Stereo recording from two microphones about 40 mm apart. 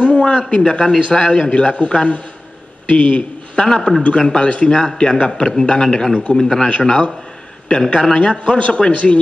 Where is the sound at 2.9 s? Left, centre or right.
Left.